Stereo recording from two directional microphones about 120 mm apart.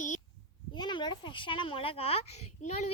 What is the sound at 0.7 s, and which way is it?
A child's voice, 40° left (ahead or behind).